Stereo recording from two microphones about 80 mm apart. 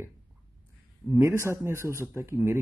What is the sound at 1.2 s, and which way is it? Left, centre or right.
Speech, right.